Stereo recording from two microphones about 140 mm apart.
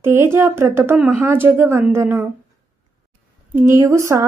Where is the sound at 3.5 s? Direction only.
20° right (ahead or behind).